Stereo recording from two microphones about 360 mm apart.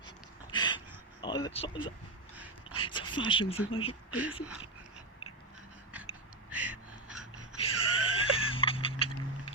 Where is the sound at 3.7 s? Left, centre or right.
Centre.